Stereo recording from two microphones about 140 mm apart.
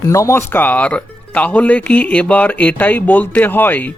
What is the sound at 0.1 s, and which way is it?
Speech, 20° left (ahead or behind).